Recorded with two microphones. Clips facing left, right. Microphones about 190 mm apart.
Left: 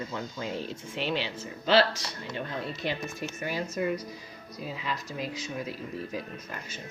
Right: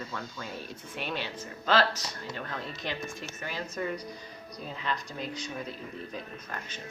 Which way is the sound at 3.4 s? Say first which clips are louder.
Left 4 dB; 10° left (ahead or behind).